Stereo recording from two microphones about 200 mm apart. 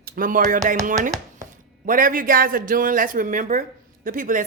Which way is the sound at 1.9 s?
40° right (ahead or behind).